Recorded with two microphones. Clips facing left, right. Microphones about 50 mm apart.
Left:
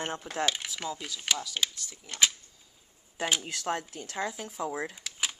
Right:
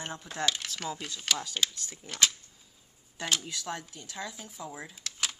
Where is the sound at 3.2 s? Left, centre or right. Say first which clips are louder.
Left 2 dB; left.